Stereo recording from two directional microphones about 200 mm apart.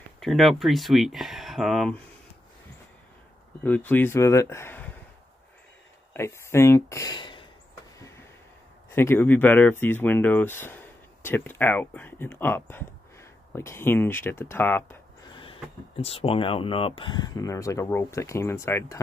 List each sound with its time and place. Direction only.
0.2 s speech: centre (ahead or behind)
3.6 s speech: 10° left (ahead or behind)
6.1 s speech: 15° left (ahead or behind)
8.9 s speech: 10° left (ahead or behind)
16.0 s speech: 30° left (ahead or behind); by 18.9 s 15° left (ahead or behind)